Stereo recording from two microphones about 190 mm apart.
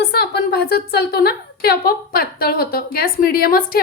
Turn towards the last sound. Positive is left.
turn(degrees=50)  # may be behind; listen again after turning